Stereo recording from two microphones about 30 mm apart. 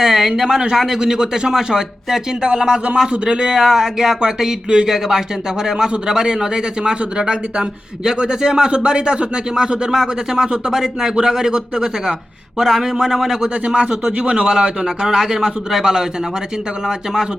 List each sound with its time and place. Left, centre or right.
0.0 s speech: centre
2.4 s speech: right
4.7 s speech: right
8.7 s speech: right
14.2 s speech: right
14.4 s speech: right